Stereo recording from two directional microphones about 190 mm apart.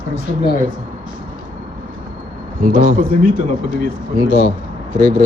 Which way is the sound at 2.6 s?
45° right (ahead or behind).